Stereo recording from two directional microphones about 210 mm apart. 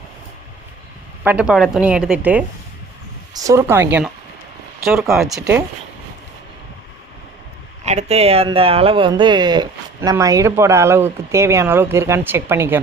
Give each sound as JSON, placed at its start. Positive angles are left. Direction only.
{"t": 1.2, "sound": "a woman's voice", "side_deg": -5}
{"t": 5.3, "sound": "speech", "side_deg": -10}
{"t": 7.9, "sound": "speech", "side_deg": -30}